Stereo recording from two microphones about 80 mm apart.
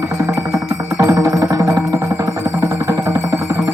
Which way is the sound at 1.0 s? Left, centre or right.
Right.